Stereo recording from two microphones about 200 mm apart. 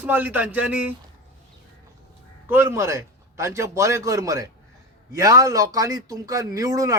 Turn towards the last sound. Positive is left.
turn(degrees=-15)  # may be behind; listen again after turning